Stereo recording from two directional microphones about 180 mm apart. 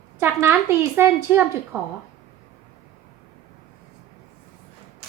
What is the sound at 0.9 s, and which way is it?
Speech, 10° right (ahead or behind).